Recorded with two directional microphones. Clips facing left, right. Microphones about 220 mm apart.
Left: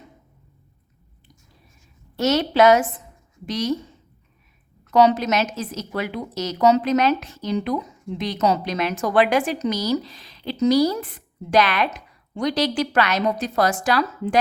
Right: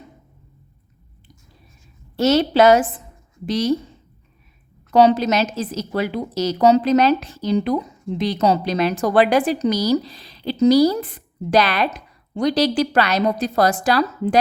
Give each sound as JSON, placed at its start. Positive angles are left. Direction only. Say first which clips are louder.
{"t": 2.1, "sound": "a woman's voice", "louder": "right 3 dB", "side_deg": -30}
{"t": 4.9, "sound": "a woman's voice", "louder": "right 3 dB", "side_deg": -30}